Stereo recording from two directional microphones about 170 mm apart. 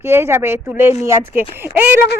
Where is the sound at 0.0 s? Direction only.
15° right (ahead or behind).